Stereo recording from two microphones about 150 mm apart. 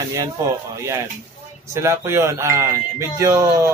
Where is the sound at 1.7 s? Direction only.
20° right (ahead or behind).